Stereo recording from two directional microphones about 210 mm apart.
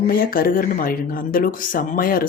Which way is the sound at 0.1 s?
45° left (ahead or behind).